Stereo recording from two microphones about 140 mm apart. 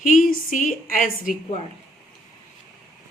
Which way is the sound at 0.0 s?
75° left (ahead or behind).